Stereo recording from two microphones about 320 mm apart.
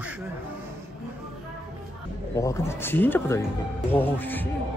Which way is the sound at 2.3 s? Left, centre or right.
Centre.